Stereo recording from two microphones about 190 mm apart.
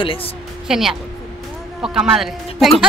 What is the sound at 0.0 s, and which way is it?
Speech, 30° left (ahead or behind).